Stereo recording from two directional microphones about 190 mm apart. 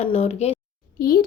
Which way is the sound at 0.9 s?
50° left (ahead or behind).